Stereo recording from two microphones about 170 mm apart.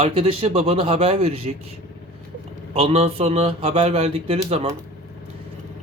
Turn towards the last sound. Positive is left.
turn(degrees=-35)  # may be behind; listen again after turning